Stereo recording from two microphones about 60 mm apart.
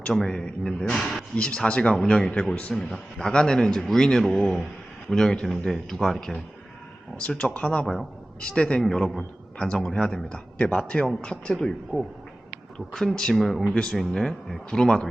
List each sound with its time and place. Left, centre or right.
0.0 s speech: centre
1.4 s a man's voice: centre
12.7 s speech: centre
13.7 s speech: centre